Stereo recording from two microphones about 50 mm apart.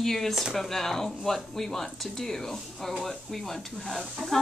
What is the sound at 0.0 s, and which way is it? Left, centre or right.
A woman's voice, centre.